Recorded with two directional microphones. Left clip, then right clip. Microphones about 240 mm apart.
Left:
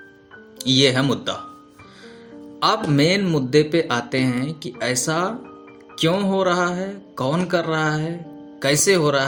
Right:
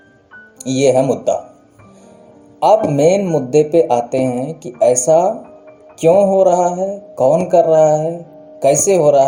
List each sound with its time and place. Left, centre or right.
0.6 s speech: left
2.6 s speech: left